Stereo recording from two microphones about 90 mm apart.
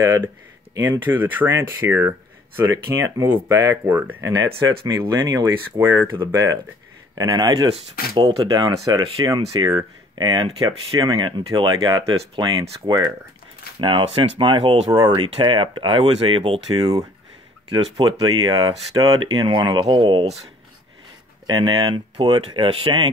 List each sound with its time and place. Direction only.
0.7 s speech: 25° right (ahead or behind)
3.8 s speech: 20° right (ahead or behind)
4.2 s speech: 40° right (ahead or behind)
5.1 s speech: 35° right (ahead or behind)
6.1 s speech: 45° right (ahead or behind)
8.5 s speech: 40° right (ahead or behind)
11.2 s speech: 60° right (ahead or behind)
11.8 s speech: 45° right (ahead or behind)
13.7 s speech: 75° right (ahead or behind)
15.0 s speech: 50° right (ahead or behind)
15.2 s speech: 70° right (ahead or behind)
17.6 s speech: 70° right (ahead or behind)
21.5 s speech: 60° right (ahead or behind)